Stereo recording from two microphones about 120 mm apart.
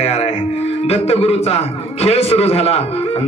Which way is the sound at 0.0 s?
60° left (ahead or behind).